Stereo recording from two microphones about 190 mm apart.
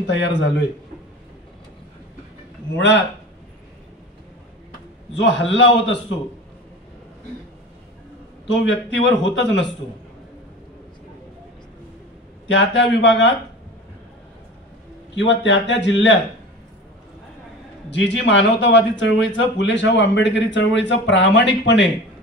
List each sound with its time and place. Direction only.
0.0 s speech: 70° left (ahead or behind)
2.7 s speech: 75° left (ahead or behind)
5.1 s speech: 70° left (ahead or behind)
8.5 s speech: 75° left (ahead or behind)
12.4 s speech: 70° left (ahead or behind)
15.1 s speech: 70° left (ahead or behind)
17.8 s speech: 70° left (ahead or behind)